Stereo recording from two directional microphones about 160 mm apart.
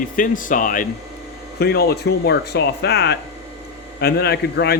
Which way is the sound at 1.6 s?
80° left.